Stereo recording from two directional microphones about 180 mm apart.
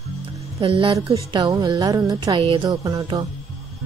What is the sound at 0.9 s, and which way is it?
A woman's voice, 20° right (ahead or behind).